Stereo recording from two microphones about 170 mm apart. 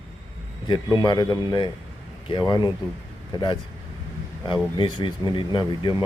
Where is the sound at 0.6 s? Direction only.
25° left (ahead or behind).